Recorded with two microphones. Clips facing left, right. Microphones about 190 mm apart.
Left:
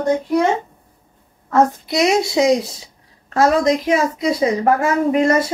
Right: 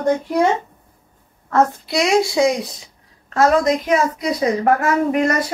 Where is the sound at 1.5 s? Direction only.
20° left (ahead or behind).